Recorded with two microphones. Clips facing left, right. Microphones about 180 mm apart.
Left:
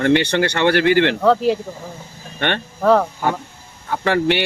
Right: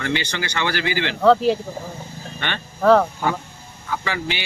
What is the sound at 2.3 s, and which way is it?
Speech, 60° left (ahead or behind).